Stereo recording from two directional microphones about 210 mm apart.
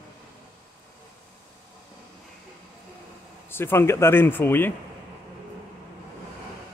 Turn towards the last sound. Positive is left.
turn(degrees=10)  # may be behind; listen again after turning